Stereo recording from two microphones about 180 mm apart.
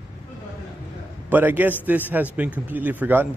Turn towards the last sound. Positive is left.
turn(degrees=-10)  # may be behind; listen again after turning